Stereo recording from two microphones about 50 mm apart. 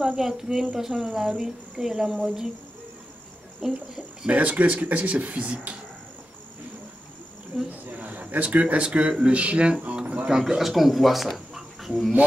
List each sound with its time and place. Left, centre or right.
0.2 s speech: centre
3.6 s speech: centre
4.3 s speech: right
7.5 s speech: centre
8.0 s a man's voice: right
10.2 s speech: centre